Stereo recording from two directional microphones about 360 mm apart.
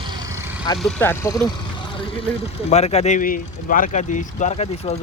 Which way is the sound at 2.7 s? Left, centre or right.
Centre.